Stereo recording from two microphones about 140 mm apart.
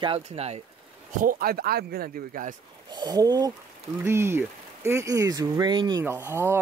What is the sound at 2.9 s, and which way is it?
Speech, 30° right (ahead or behind).